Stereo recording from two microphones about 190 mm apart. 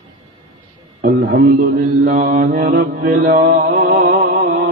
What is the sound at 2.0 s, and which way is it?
Mantra, 45° right (ahead or behind).